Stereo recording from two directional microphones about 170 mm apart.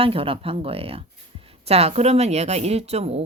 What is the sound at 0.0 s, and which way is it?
A woman's voice, 35° right (ahead or behind).